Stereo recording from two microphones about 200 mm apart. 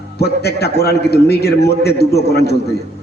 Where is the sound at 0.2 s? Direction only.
55° left (ahead or behind).